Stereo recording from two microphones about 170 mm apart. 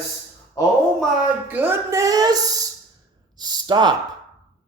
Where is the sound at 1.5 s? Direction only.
10° right (ahead or behind).